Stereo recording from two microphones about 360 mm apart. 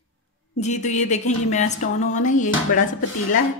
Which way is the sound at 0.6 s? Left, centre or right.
Centre.